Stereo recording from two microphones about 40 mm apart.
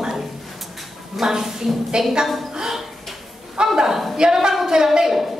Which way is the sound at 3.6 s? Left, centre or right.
Right.